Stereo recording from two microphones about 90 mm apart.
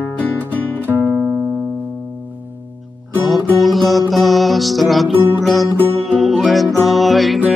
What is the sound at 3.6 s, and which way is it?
Music, centre (ahead or behind).